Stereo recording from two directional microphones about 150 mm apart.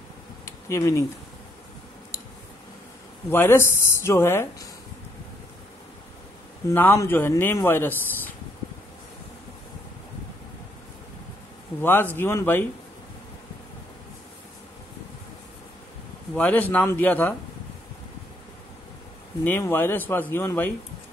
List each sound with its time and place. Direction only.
0.5 s a sound: 20° left (ahead or behind)
3.3 s speech: 15° left (ahead or behind)
6.7 s speech: 15° left (ahead or behind)
11.8 s speech: 15° left (ahead or behind)
16.3 s speech: 10° left (ahead or behind)
19.4 s speech: 15° left (ahead or behind)